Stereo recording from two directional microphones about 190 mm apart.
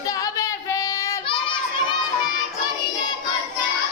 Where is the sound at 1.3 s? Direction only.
25° left (ahead or behind).